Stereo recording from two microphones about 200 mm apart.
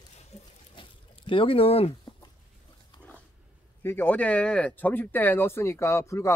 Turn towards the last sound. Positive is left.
turn(degrees=15)  # may be behind; listen again after turning